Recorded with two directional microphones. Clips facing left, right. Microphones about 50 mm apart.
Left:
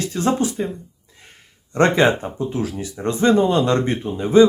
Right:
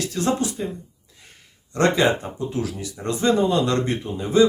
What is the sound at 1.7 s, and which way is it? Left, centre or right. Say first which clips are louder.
Speech: left 3 dB; left.